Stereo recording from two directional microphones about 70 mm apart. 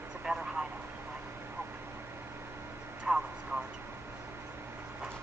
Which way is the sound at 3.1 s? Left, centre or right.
Centre.